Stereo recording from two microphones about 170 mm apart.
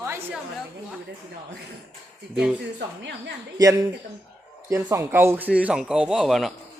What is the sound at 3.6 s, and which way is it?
A woman's voice, 20° right (ahead or behind).